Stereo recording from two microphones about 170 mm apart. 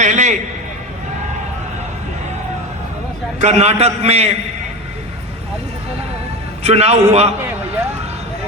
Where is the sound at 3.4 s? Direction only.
40° right (ahead or behind).